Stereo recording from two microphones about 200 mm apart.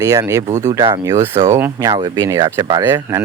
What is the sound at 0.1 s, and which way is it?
Speech, 15° right (ahead or behind).